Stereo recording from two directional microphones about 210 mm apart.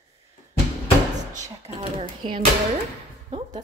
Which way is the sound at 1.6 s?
25° right (ahead or behind).